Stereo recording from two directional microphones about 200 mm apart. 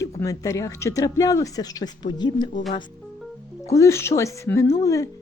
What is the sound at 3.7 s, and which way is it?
Speech, 15° left (ahead or behind).